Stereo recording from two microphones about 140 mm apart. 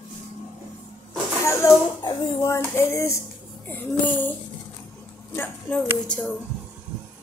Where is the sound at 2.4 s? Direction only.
20° left (ahead or behind).